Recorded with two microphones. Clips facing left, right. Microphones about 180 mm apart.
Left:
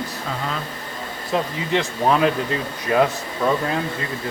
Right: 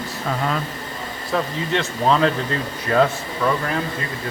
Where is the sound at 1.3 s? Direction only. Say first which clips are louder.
Left 1 dB; 20° left (ahead or behind).